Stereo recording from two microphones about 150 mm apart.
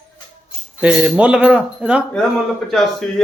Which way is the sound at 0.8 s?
5° right (ahead or behind).